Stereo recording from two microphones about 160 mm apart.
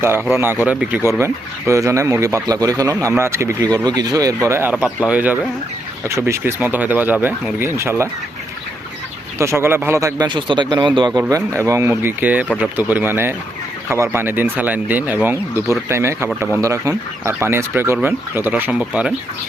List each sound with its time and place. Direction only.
0.6 s speech: 10° right (ahead or behind)
9.4 s speech: 15° right (ahead or behind)